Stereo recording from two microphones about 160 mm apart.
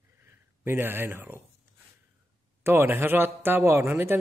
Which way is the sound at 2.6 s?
15° right (ahead or behind).